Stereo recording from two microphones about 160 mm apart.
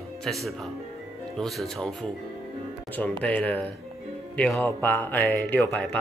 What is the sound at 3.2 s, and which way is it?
Speech, 10° left (ahead or behind).